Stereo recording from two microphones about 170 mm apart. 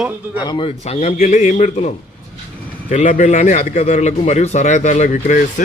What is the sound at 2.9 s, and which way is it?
A man's voice, 45° left (ahead or behind).